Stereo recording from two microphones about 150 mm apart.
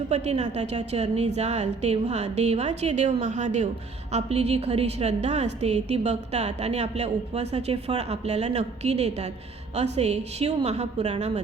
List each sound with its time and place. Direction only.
0.1 s a woman's voice: 50° right (ahead or behind)